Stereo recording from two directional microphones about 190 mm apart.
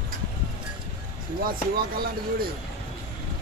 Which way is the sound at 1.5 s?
50° right (ahead or behind).